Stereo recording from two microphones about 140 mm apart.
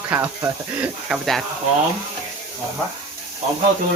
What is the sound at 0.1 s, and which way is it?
Speech, 10° right (ahead or behind).